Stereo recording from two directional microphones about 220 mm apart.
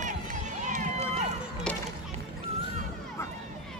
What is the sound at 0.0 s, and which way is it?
Run, 35° right (ahead or behind).